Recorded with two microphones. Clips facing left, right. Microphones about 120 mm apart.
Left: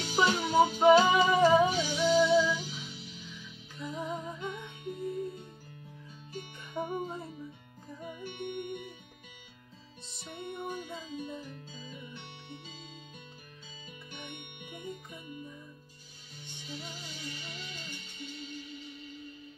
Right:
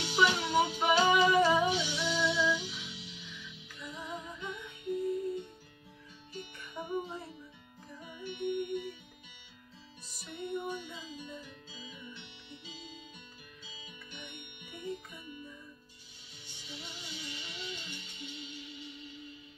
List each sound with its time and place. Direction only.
0.0 s music: 40° left (ahead or behind)
6.3 s music: 50° left (ahead or behind)
10.4 s music: 50° left (ahead or behind)
16.6 s music: 45° left (ahead or behind)